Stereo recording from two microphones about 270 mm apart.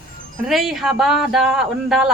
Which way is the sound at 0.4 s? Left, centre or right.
Centre.